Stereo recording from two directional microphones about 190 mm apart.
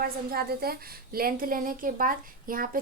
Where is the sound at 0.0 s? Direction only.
50° right (ahead or behind).